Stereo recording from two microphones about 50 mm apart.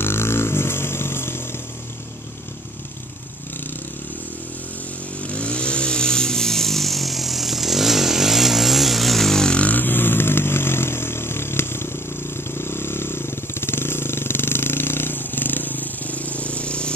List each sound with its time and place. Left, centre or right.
0.0 s vehicle: left
5.2 s chainsaw: left; by 9.6 s centre
9.6 s motorcycle: left
12.4 s vehicle: left